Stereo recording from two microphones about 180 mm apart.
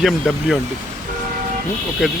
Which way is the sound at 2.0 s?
5° right (ahead or behind).